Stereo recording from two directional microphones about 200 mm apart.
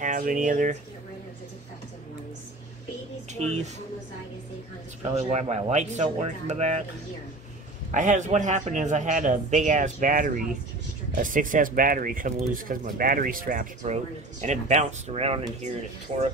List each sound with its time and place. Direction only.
0.0 s a man's voice: 40° right (ahead or behind)
3.3 s speech: 35° right (ahead or behind)
5.0 s a man's voice: 35° right (ahead or behind)
7.9 s a man's voice: 40° right (ahead or behind)